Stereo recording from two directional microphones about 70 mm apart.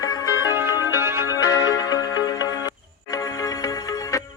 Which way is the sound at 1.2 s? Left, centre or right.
Left.